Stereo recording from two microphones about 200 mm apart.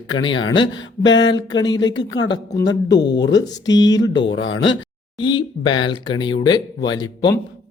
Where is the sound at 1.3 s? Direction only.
20° left (ahead or behind).